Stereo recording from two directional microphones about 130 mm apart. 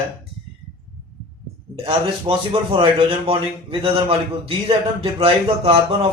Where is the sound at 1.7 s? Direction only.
45° right (ahead or behind).